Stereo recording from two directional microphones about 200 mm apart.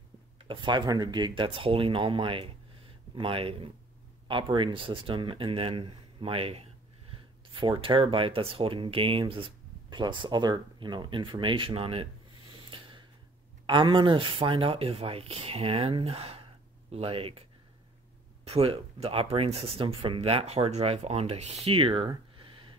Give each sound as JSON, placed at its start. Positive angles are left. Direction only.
{"t": 0.4, "sound": "speech", "side_deg": -25}
{"t": 12.7, "sound": "a sound", "side_deg": -25}
{"t": 13.7, "sound": "speech", "side_deg": -25}